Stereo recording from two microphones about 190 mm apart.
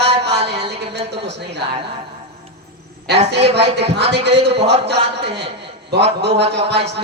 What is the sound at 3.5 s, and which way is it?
A man's voice, 60° right (ahead or behind).